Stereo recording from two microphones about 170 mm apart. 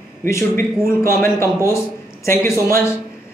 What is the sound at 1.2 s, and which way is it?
Speech, 15° left (ahead or behind).